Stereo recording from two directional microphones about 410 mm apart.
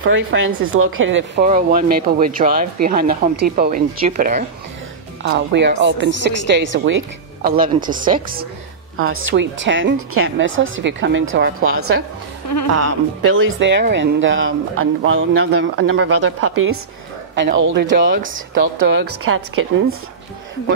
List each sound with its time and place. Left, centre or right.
0.0 s speech: right
8.9 s speech: right